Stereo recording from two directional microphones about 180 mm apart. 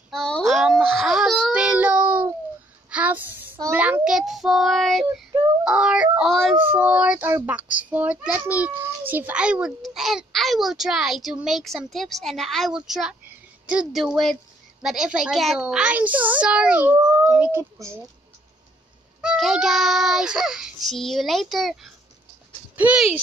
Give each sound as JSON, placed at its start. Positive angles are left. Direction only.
{"t": 0.1, "sound": "baby cry", "side_deg": 0}
{"t": 2.9, "sound": "a sound", "side_deg": -10}
{"t": 3.7, "sound": "child singing", "side_deg": -10}
{"t": 5.6, "sound": "yodeling", "side_deg": -5}
{"t": 6.5, "sound": "a child's voice", "side_deg": -10}
{"t": 19.2, "sound": "a child's voice", "side_deg": 0}